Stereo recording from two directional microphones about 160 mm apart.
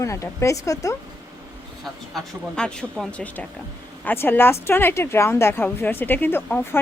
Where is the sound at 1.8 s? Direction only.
5° left (ahead or behind).